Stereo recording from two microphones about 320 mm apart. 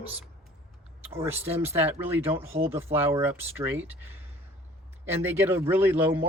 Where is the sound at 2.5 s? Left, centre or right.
Centre.